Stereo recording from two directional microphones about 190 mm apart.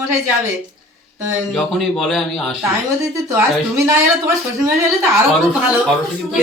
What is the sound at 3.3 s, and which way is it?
Speech, 15° right (ahead or behind).